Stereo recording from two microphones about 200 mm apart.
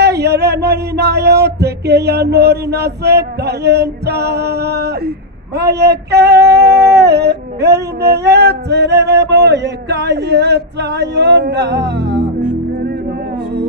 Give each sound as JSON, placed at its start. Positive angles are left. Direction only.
{"t": 0.0, "sound": "female singing", "side_deg": -55}